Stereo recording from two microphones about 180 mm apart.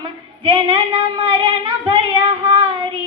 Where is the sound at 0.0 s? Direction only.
25° right (ahead or behind).